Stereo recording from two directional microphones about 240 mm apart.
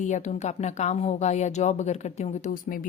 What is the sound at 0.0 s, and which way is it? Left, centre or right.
A woman's voice, left.